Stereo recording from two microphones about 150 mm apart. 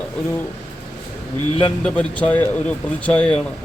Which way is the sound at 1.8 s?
5° left (ahead or behind).